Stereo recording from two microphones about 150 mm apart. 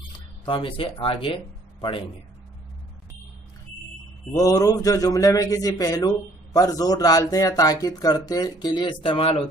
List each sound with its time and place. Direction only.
0.5 s speech: 35° left (ahead or behind)
4.4 s a man's voice: 25° left (ahead or behind)